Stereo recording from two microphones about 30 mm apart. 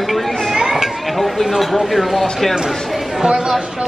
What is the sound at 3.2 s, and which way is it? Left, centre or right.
Speech, right.